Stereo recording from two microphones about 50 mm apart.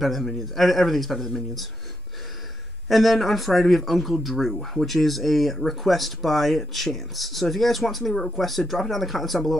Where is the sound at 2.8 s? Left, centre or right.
Centre.